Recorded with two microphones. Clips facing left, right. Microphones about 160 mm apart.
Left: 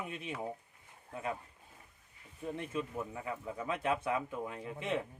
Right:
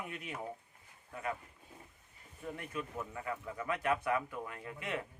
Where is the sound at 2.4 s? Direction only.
20° left (ahead or behind).